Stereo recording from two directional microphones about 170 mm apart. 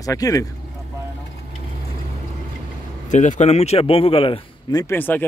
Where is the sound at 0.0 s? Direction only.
20° left (ahead or behind).